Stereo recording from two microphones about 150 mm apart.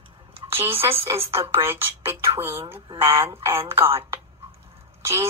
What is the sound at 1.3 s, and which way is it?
Speech, 15° right (ahead or behind).